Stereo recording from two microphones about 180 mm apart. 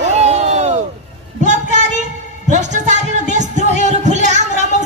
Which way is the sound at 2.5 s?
40° right (ahead or behind).